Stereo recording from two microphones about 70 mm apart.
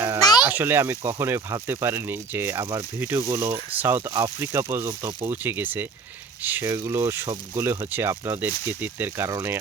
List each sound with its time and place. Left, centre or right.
0.2 s a sound: left
0.4 s speech: right
3.8 s speech: right
5.4 s speech: right
6.7 s speech: right